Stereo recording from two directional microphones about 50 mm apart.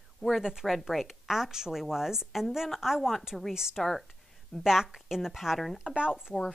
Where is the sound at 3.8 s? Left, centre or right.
Centre.